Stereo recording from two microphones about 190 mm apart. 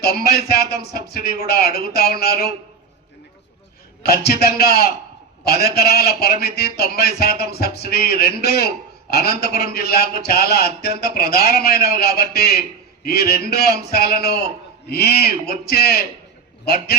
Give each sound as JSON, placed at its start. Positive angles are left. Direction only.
{"t": 0.0, "sound": "a man's voice", "side_deg": 55}
{"t": 4.0, "sound": "a man's voice", "side_deg": 55}